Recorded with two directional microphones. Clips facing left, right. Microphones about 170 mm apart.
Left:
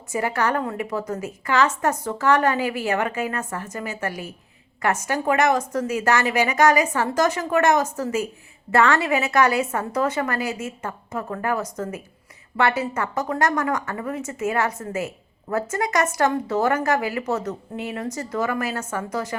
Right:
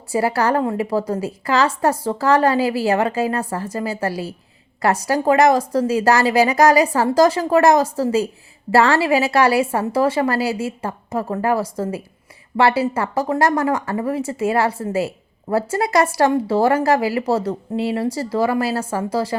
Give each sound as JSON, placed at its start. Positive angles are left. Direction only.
{"t": 0.1, "sound": "speech", "side_deg": -35}